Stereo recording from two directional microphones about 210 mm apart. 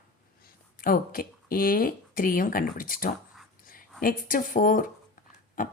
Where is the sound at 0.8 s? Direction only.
45° left (ahead or behind).